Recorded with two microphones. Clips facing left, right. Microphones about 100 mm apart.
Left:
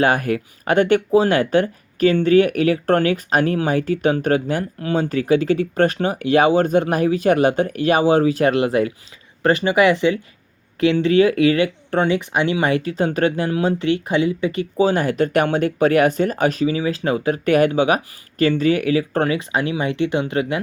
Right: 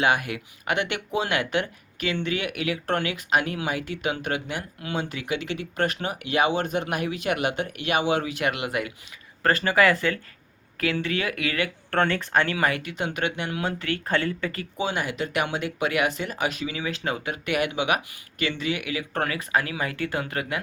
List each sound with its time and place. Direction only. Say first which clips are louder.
0.0 s speech: left 6 dB; 40° left (ahead or behind)
9.4 s speech: left 5 dB; 20° left (ahead or behind)
11.9 s speech: left 4 dB; 15° left (ahead or behind)
14.6 s speech: left 12 dB; 40° left (ahead or behind)